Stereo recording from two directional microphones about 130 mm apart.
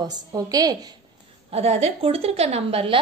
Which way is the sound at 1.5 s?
55° right (ahead or behind).